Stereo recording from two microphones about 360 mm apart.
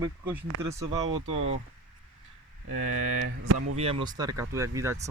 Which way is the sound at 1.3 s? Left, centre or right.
Right.